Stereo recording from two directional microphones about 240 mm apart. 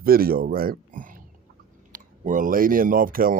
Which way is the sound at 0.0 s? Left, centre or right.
Right.